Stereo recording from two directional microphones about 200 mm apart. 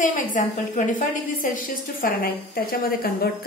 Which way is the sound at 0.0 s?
40° left (ahead or behind).